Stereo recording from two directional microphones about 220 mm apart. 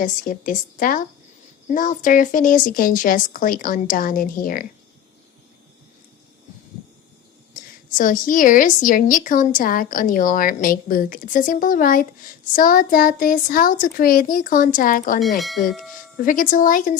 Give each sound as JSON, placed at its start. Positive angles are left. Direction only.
{"t": 0.0, "sound": "a woman's voice", "side_deg": 35}
{"t": 7.5, "sound": "a woman's voice", "side_deg": 35}
{"t": 15.4, "sound": "speech", "side_deg": 0}
{"t": 16.1, "sound": "a woman's voice", "side_deg": 35}